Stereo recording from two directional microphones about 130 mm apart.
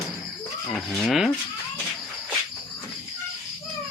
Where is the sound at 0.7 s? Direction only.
Centre (ahead or behind).